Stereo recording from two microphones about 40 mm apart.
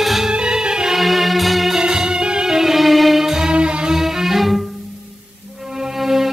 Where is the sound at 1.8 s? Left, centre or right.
Centre.